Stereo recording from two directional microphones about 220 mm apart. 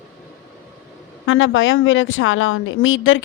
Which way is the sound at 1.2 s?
60° left (ahead or behind).